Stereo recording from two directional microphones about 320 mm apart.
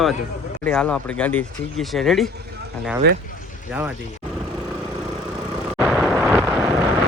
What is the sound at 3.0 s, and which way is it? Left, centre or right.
Speech, right.